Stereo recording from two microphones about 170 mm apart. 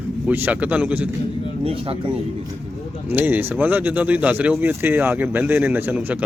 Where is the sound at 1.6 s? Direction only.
35° right (ahead or behind).